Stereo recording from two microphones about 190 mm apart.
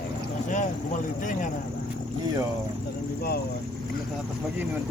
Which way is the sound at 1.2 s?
45° left (ahead or behind).